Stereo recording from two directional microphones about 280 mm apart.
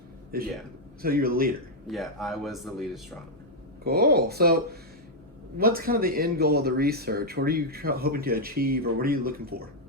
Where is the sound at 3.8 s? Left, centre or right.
Right.